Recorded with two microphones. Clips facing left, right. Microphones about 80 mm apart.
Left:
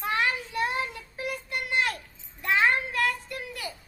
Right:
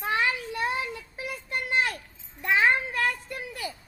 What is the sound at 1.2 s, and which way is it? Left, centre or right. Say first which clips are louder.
Child singing: left 1 dB; right.